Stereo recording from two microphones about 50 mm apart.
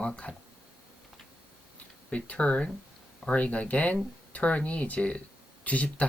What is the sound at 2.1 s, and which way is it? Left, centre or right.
Speech, left.